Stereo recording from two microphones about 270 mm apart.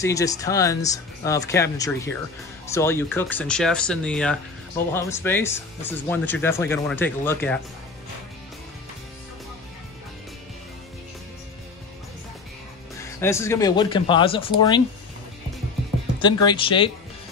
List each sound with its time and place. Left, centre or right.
0.0 s speech: centre
13.0 s speech: centre
16.2 s speech: centre